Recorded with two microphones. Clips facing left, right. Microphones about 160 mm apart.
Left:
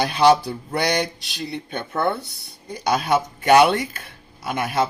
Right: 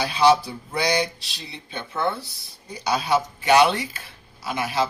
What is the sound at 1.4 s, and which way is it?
Speech, 55° left (ahead or behind).